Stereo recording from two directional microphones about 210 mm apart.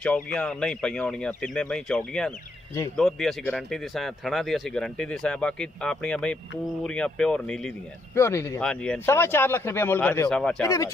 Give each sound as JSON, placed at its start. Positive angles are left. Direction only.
{"t": 0.0, "sound": "speech", "side_deg": 5}
{"t": 10.6, "sound": "speech", "side_deg": 15}